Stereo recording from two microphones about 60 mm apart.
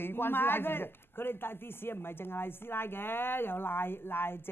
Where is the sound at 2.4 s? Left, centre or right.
Left.